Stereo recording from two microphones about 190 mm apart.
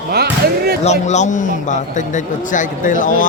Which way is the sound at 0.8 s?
40° left (ahead or behind).